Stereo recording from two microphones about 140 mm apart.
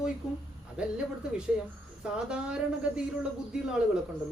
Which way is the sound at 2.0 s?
5° right (ahead or behind).